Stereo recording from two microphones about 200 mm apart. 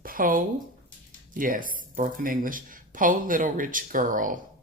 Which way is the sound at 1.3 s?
45° right (ahead or behind).